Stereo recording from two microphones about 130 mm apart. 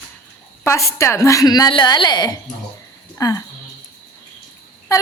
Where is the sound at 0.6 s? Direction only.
20° left (ahead or behind).